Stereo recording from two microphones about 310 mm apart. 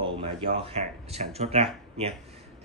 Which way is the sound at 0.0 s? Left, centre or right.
Centre.